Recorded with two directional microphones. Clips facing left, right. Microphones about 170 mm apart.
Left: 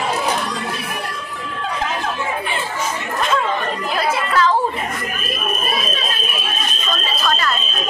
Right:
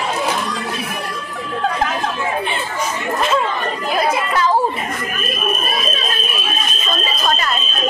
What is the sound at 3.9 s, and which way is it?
Chatter, 10° right (ahead or behind).